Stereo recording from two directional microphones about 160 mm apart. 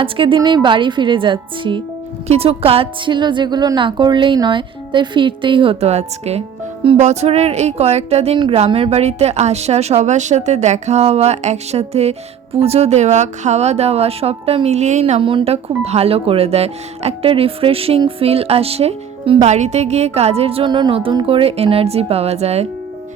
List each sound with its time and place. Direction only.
0.0 s speech: 30° right (ahead or behind)